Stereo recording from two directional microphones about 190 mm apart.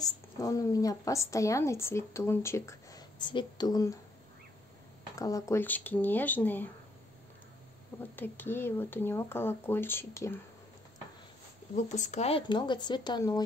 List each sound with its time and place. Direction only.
0.0 s a woman's voice: 20° left (ahead or behind)
5.1 s a woman's voice: 20° left (ahead or behind)
8.2 s a woman's voice: 10° left (ahead or behind)
11.7 s speech: 40° left (ahead or behind); by 13.4 s 20° left (ahead or behind)